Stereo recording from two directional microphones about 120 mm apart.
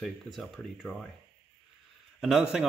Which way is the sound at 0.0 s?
Centre (ahead or behind).